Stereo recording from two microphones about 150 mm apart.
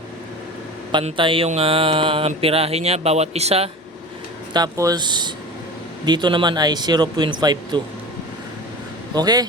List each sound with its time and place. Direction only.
1.0 s speech: 35° right (ahead or behind)
4.5 s speech: 25° right (ahead or behind)
9.1 s speech: 25° right (ahead or behind)